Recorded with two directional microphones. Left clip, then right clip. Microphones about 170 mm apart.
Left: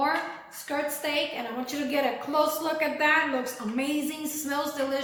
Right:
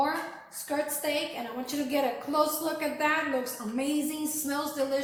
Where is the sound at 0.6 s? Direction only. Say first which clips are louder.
Left 1 dB; 15° right (ahead or behind).